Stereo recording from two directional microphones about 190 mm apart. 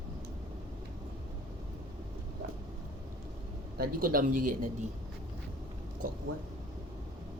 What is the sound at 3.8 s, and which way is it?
Speech, 50° right (ahead or behind).